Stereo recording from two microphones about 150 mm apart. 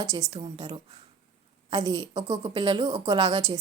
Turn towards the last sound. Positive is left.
turn(degrees=-30)  # may be behind; listen again after turning